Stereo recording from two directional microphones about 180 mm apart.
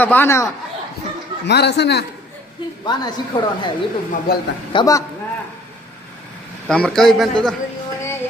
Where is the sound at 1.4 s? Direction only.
70° left (ahead or behind).